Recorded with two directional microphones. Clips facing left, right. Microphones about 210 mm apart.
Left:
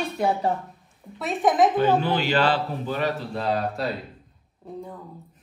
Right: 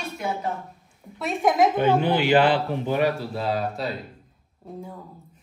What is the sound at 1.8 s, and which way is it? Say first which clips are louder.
A woman's voice: right 1 dB; 15° right (ahead or behind).